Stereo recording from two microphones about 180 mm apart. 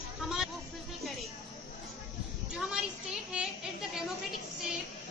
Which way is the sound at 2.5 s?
5° right (ahead or behind).